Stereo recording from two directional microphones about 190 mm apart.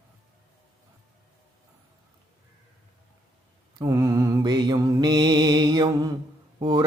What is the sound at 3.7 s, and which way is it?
Mantra, 15° right (ahead or behind).